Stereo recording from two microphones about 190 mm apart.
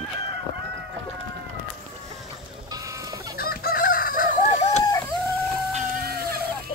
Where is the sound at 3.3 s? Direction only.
50° left (ahead or behind).